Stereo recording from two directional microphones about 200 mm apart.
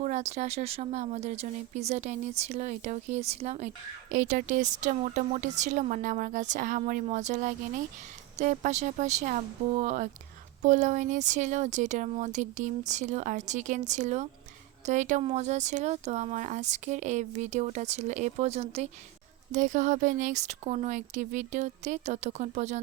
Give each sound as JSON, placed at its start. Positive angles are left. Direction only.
{"t": 0.0, "sound": "speech", "side_deg": -35}